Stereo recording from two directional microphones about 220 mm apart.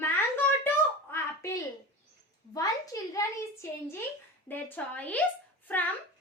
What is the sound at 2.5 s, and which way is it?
Speech, 15° left (ahead or behind).